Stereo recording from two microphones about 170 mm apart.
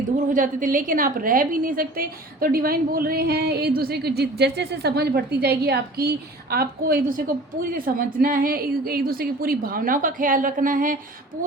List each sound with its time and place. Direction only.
0.3 s a woman's voice: 55° right (ahead or behind)